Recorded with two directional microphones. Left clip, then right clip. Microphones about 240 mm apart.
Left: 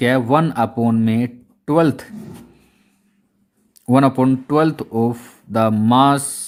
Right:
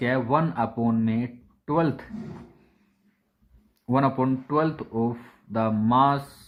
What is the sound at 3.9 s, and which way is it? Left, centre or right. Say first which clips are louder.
Speech: left 8 dB; left.